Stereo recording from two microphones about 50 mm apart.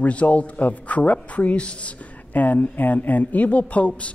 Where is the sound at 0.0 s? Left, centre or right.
Left.